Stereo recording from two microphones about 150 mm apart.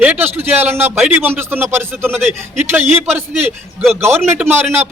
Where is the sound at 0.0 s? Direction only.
10° right (ahead or behind).